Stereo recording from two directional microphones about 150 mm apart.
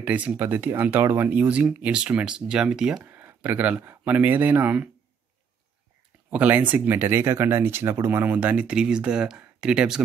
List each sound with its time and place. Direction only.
0.0 s speech: 10° right (ahead or behind)
6.3 s speech: 10° right (ahead or behind)